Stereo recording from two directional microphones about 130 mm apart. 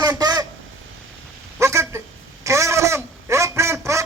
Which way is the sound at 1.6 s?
20° right (ahead or behind).